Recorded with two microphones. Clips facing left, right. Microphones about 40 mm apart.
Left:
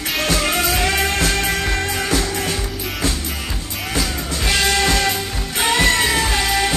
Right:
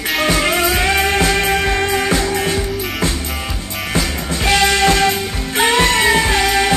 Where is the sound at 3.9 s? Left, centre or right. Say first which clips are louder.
Right 3 dB; right.